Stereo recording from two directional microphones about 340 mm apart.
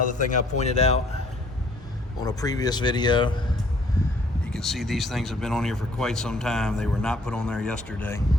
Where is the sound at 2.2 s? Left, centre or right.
Centre.